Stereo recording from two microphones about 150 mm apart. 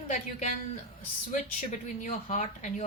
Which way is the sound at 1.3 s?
55° left (ahead or behind).